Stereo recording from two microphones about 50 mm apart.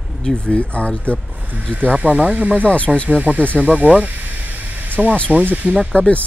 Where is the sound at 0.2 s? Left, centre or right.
Centre.